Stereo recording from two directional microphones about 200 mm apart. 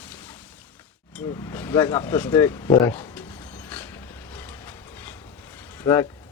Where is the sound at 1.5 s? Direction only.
10° left (ahead or behind).